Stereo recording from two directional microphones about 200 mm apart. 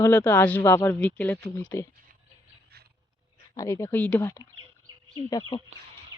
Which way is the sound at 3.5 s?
15° left (ahead or behind).